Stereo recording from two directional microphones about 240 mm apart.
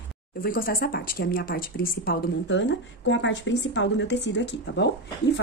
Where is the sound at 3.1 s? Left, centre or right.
Left.